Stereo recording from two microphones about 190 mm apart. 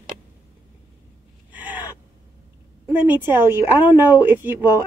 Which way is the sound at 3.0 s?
10° right (ahead or behind).